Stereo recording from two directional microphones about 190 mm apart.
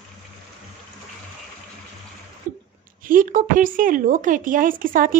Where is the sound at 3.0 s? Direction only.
45° right (ahead or behind).